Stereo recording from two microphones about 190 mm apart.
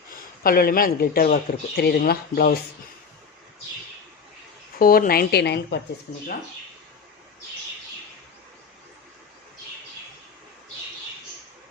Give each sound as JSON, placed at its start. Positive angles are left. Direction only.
{"t": 0.1, "sound": "speech", "side_deg": 50}
{"t": 4.8, "sound": "speech", "side_deg": 50}
{"t": 6.1, "sound": "speech", "side_deg": 45}